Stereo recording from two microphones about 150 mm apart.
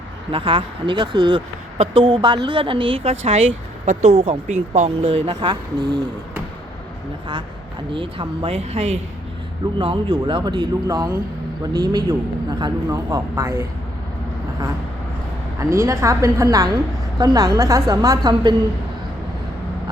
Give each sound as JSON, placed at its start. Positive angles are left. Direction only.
{"t": 0.3, "sound": "a woman's voice", "side_deg": -35}
{"t": 7.9, "sound": "a woman's voice", "side_deg": -35}
{"t": 9.7, "sound": "a woman's voice", "side_deg": -35}
{"t": 15.5, "sound": "a woman's voice", "side_deg": -20}